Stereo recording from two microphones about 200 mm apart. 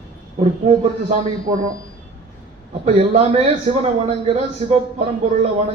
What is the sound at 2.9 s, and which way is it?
A man's voice, 30° right (ahead or behind).